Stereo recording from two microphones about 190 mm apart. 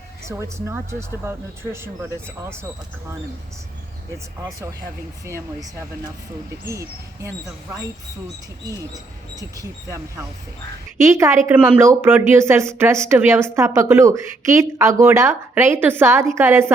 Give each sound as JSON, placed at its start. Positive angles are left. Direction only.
{"t": 0.3, "sound": "speech", "side_deg": -15}
{"t": 5.2, "sound": "speech", "side_deg": -15}
{"t": 6.7, "sound": "speech", "side_deg": -15}
{"t": 9.3, "sound": "speech", "side_deg": -20}